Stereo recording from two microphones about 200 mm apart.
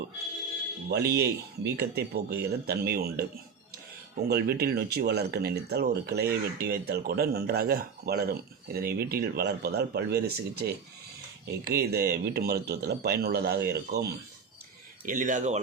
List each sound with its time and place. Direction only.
0.9 s speech: 55° right (ahead or behind)
15.0 s speech: 40° right (ahead or behind)